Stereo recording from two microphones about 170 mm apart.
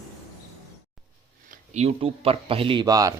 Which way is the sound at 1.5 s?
40° right (ahead or behind).